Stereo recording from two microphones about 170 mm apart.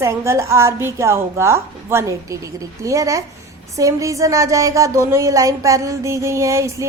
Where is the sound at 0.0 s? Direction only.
15° right (ahead or behind).